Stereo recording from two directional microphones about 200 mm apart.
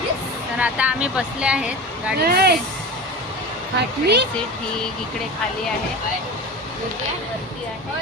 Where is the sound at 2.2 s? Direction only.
50° right (ahead or behind).